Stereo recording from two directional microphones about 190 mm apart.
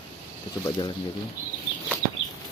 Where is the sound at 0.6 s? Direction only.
25° left (ahead or behind).